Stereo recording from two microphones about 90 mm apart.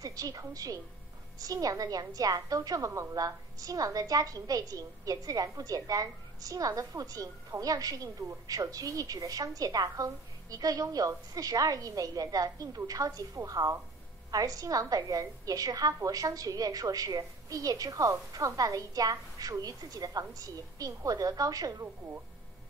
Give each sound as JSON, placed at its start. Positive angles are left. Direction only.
{"t": 0.0, "sound": "a woman's voice", "side_deg": -40}